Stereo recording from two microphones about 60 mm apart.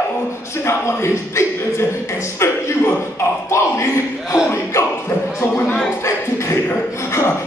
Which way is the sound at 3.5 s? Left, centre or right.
Left.